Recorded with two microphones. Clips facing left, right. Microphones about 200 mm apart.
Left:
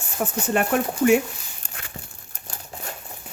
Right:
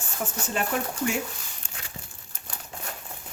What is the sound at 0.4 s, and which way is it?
Speech, 60° left (ahead or behind).